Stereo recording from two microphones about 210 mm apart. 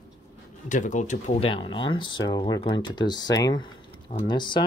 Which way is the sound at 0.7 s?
35° left (ahead or behind).